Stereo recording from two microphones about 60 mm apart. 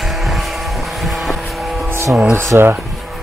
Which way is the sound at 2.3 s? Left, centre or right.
Right.